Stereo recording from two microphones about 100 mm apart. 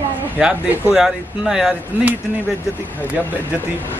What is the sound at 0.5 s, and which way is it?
Speech, 20° right (ahead or behind).